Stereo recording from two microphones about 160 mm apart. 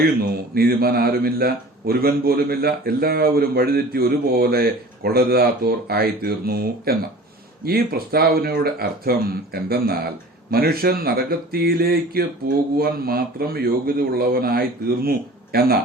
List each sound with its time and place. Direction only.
0.2 s a man's voice: 75° right (ahead or behind)